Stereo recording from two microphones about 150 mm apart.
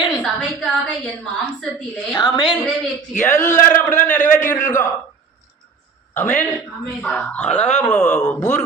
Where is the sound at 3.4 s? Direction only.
20° left (ahead or behind).